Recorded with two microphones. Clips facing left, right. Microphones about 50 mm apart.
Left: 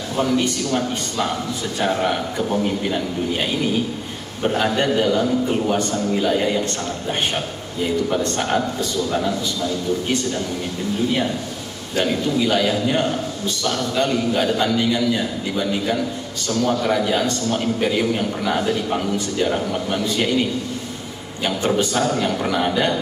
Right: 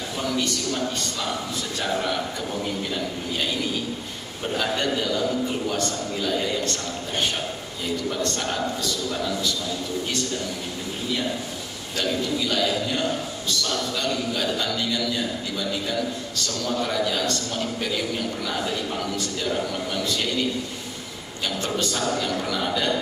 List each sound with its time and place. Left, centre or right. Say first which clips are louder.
0.2 s a man's voice: left 7 dB; left
7.8 s a man's voice: left 6 dB; left
11.9 s a man's voice: left 5 dB; left
21.7 s a man's voice: left 5 dB; left